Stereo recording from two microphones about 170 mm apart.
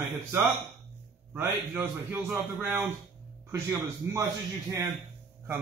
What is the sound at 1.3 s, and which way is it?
A man's voice, 10° right (ahead or behind).